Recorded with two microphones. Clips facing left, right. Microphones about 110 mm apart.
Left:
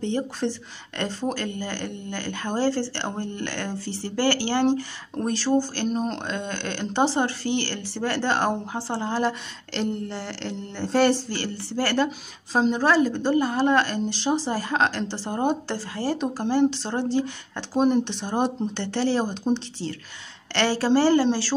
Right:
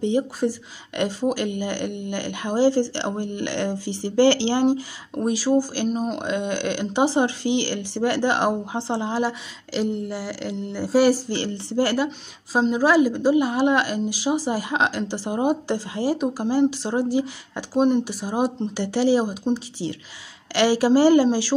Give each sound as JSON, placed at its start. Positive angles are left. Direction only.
{"t": 0.0, "sound": "speech", "side_deg": -10}
{"t": 12.5, "sound": "speech", "side_deg": -5}